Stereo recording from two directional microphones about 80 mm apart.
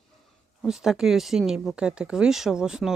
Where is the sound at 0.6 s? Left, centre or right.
Centre.